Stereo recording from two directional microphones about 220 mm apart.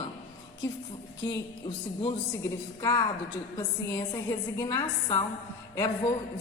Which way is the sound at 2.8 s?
15° left (ahead or behind).